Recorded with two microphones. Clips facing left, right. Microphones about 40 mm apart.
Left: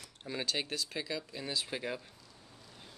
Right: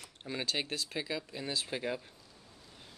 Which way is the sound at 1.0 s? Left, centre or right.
Centre.